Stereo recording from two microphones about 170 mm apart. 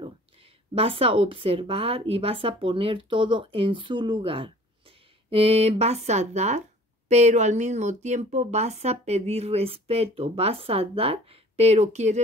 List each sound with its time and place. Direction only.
0.7 s speech: 35° right (ahead or behind)